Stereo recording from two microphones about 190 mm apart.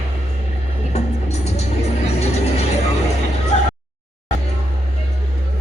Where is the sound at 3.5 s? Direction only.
35° left (ahead or behind).